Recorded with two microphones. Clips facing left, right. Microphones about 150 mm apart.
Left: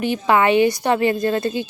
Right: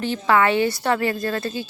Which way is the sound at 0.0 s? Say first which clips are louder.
Left 2 dB; 15° left (ahead or behind).